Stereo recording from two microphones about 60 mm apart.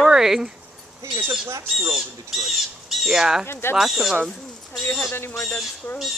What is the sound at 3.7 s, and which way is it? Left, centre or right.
Speech, centre.